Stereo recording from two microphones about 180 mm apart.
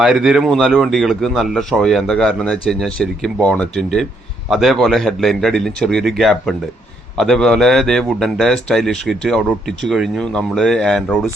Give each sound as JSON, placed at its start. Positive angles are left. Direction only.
{"t": 0.0, "sound": "speech", "side_deg": 0}